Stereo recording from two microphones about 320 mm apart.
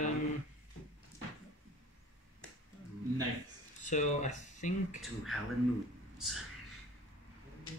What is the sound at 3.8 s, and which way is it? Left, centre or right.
Speech, left.